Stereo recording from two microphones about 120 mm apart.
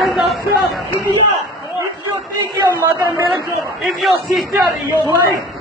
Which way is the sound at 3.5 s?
Centre (ahead or behind).